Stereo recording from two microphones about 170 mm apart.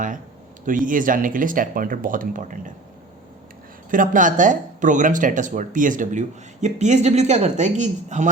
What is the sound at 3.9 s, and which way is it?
Speech, 50° right (ahead or behind).